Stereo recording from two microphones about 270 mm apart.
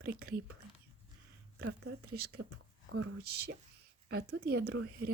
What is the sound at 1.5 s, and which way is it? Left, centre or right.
Speech, right.